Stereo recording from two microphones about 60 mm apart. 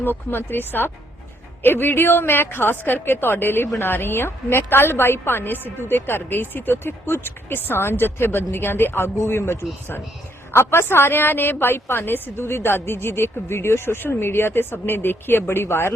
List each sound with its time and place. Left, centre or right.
0.0 s a woman's voice: left